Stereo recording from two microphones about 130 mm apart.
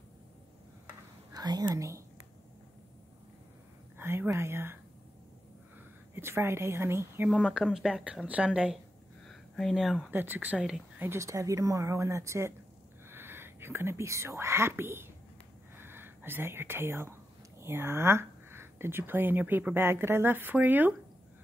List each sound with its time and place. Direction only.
1.3 s speech: 30° right (ahead or behind)
4.0 s whispering: 20° right (ahead or behind)
6.1 s speech: 20° right (ahead or behind)
7.2 s speech: 10° left (ahead or behind)
7.5 s speech: 5° right (ahead or behind)
10.1 s speech: 15° right (ahead or behind)
15.7 s whispering: 15° right (ahead or behind)
17.6 s speech: 20° right (ahead or behind)